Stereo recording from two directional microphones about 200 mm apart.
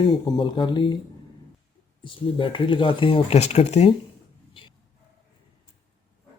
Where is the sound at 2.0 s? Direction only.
25° left (ahead or behind).